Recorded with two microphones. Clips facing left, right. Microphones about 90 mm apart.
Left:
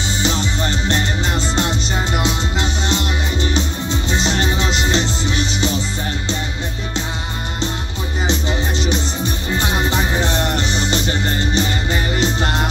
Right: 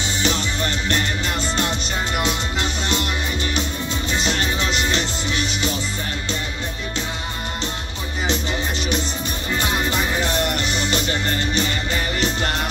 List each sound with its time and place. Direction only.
0.2 s music: 20° left (ahead or behind)
4.1 s music: 25° left (ahead or behind)
8.3 s music: 20° left (ahead or behind)